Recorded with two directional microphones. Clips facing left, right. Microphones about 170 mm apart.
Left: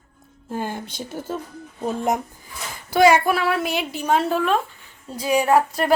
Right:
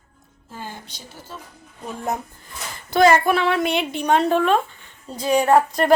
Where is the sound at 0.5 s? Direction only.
55° left (ahead or behind).